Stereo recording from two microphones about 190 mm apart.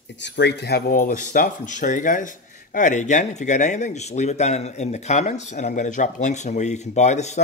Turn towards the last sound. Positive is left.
turn(degrees=35)  # may be behind; listen again after turning